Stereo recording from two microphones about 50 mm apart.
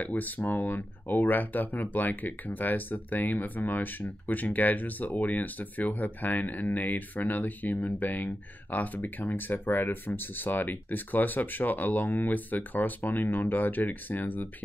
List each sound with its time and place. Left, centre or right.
0.0 s speech: left